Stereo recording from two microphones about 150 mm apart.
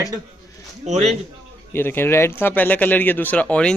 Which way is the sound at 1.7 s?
15° left (ahead or behind).